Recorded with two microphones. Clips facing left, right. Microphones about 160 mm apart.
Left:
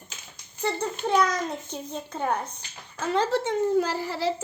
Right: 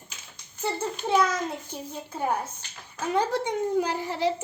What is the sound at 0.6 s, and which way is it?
Speech, 5° right (ahead or behind).